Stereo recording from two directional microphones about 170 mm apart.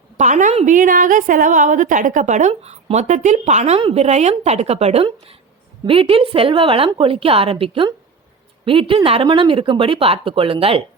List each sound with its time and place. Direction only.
0.2 s a woman's voice: 45° right (ahead or behind)